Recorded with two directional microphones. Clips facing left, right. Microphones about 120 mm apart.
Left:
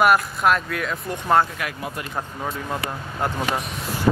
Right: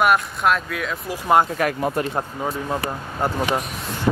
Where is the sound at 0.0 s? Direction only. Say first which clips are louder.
Left 1 dB; centre (ahead or behind).